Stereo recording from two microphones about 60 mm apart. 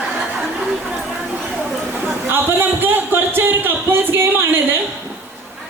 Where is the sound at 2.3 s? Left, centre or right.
Right.